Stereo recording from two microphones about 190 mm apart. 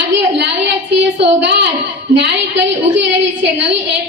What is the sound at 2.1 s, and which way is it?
Child singing, 65° right (ahead or behind).